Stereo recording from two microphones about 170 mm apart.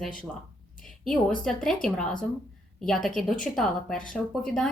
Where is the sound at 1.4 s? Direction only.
5° left (ahead or behind).